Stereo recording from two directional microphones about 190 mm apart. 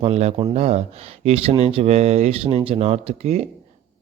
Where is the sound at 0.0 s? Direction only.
35° right (ahead or behind).